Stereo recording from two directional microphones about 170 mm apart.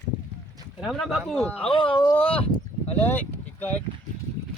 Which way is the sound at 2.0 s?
10° left (ahead or behind).